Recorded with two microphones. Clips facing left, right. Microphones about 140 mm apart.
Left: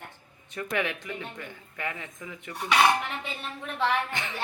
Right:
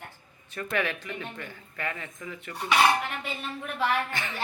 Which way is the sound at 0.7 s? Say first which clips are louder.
Right 1 dB; 15° left (ahead or behind).